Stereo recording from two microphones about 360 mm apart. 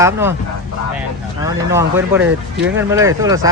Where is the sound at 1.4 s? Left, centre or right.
Centre.